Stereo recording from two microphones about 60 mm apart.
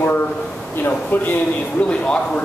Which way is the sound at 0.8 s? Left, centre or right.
Left.